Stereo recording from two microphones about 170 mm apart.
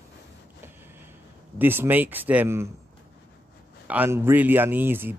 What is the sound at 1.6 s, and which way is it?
Speech, 10° right (ahead or behind).